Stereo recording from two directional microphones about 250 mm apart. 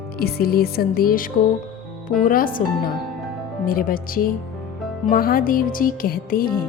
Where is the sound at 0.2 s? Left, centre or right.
Left.